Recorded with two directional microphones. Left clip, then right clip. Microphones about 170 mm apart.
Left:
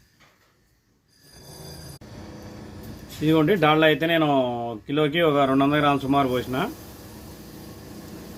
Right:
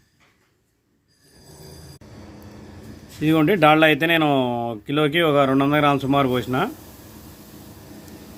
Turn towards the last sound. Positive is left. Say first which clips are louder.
# right 2 dB
turn(degrees=-45)  # may be behind; listen again after turning